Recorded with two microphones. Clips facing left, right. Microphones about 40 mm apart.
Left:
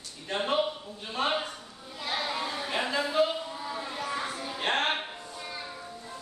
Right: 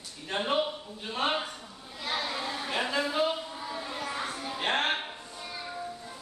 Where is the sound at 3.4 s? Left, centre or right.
Centre.